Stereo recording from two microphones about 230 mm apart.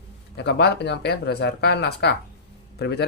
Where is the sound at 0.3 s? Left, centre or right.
Left.